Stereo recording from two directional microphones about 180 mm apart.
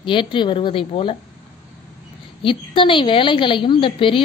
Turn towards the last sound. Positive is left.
turn(degrees=30)  # may be behind; listen again after turning